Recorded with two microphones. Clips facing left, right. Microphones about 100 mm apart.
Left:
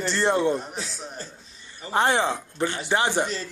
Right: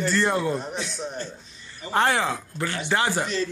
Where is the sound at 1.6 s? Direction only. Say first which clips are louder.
Even; 20° left (ahead or behind).